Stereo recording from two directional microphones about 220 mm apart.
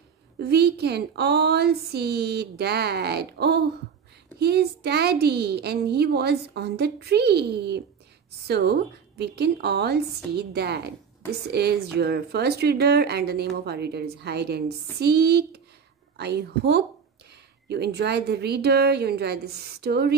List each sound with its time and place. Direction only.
0.4 s speech: 45° right (ahead or behind)